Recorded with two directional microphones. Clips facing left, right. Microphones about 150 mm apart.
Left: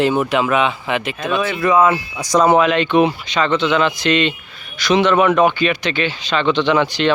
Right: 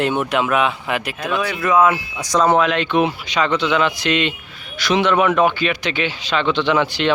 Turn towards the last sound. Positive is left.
turn(degrees=-10)  # may be behind; listen again after turning